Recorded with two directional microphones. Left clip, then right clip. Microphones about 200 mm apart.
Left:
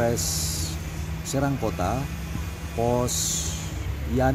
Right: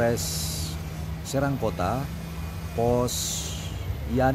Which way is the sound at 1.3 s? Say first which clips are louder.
Even; 5° right (ahead or behind).